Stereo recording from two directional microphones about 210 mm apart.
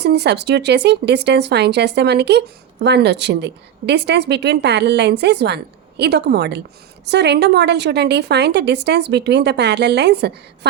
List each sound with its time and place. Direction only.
0.0 s speech: 50° right (ahead or behind)